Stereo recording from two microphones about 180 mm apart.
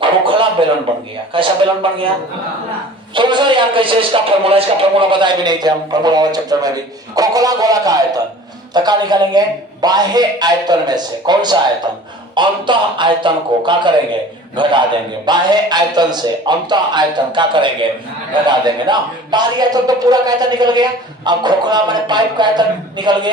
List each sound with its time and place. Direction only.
0.0 s a sound: 30° right (ahead or behind)
1.3 s a man's voice: 30° right (ahead or behind)
3.2 s a man's voice: 25° right (ahead or behind)